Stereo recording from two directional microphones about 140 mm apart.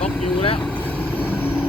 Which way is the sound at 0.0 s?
40° left (ahead or behind).